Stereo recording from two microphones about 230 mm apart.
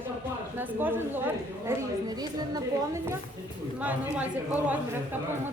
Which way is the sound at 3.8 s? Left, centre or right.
Centre.